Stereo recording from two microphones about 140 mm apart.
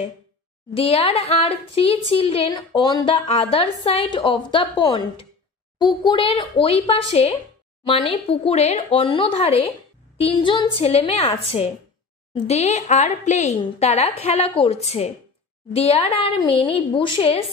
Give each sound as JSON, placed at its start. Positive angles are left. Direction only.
{"t": 0.7, "sound": "a woman's voice", "side_deg": 45}
{"t": 3.3, "sound": "a woman's voice", "side_deg": 45}